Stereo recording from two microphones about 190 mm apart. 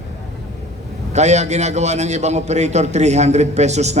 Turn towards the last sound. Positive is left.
turn(degrees=-35)  # may be behind; listen again after turning